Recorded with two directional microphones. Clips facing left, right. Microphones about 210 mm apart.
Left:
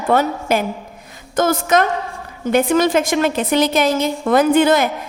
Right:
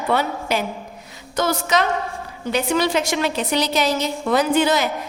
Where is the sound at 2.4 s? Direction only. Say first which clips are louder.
Left 6 dB; 50° left (ahead or behind).